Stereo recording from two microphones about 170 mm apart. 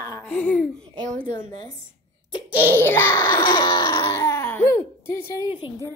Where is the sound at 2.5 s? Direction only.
15° left (ahead or behind).